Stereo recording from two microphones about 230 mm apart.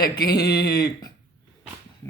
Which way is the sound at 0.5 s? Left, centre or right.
Centre.